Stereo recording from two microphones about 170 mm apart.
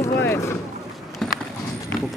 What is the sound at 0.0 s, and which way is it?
Boat, 15° left (ahead or behind).